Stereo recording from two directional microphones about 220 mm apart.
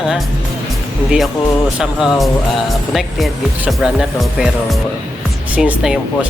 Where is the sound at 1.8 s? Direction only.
Centre (ahead or behind).